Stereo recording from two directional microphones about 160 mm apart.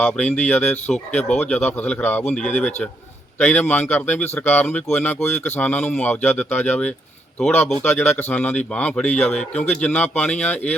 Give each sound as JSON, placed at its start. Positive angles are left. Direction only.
{"t": 0.0, "sound": "a man's voice", "side_deg": 5}